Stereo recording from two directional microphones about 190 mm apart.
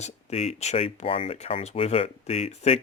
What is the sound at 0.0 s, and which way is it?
Speech, 30° left (ahead or behind).